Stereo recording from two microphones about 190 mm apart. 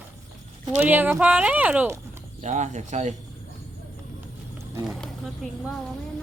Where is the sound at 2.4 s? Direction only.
40° right (ahead or behind).